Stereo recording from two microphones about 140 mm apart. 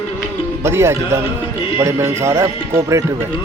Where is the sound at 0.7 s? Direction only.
20° right (ahead or behind).